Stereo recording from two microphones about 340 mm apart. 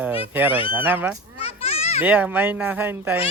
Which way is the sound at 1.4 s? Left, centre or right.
Centre.